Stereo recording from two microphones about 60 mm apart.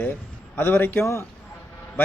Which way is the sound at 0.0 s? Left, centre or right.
Left.